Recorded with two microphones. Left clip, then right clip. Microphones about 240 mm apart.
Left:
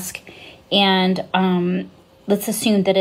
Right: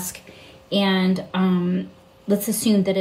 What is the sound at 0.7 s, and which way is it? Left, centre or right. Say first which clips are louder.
A woman's voice: left 5 dB; centre.